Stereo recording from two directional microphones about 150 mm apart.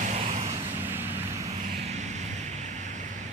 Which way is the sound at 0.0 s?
55° right (ahead or behind).